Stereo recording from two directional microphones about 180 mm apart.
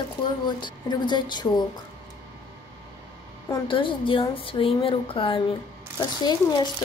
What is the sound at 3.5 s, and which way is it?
Speech, 30° left (ahead or behind).